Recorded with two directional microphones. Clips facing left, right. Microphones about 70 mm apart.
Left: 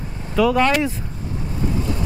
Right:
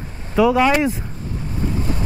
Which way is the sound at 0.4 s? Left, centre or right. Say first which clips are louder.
Right 2 dB; centre.